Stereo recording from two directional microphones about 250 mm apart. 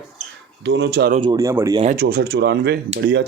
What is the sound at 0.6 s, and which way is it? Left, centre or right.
Speech, right.